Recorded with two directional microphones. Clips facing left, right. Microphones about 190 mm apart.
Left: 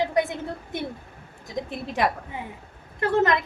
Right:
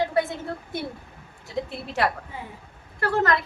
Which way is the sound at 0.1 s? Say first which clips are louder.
Even; 15° left (ahead or behind).